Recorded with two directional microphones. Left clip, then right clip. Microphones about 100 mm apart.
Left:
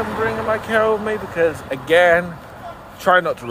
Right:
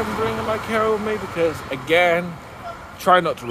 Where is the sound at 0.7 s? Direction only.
35° right (ahead or behind).